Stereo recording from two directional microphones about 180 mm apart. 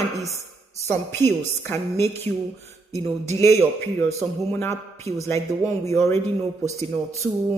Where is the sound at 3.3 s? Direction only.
15° left (ahead or behind).